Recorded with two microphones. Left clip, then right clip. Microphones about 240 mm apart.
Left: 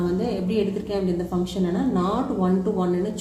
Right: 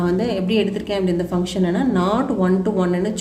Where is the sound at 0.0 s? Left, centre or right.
Right.